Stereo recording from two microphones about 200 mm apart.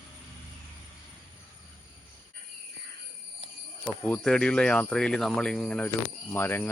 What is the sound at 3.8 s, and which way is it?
Speech, 5° left (ahead or behind).